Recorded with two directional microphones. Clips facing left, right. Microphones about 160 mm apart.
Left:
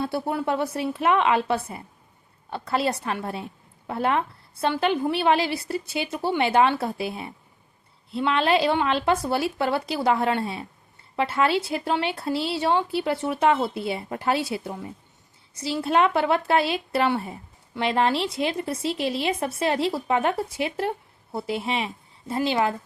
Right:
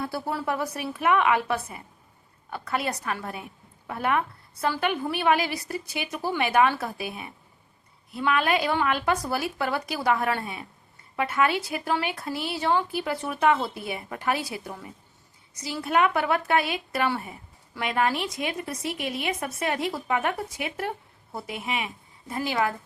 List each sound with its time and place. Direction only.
0.0 s a woman's voice: 25° left (ahead or behind)